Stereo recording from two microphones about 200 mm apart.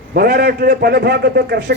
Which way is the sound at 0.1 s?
50° right (ahead or behind).